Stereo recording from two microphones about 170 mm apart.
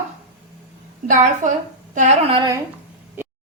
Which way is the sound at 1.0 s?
45° right (ahead or behind).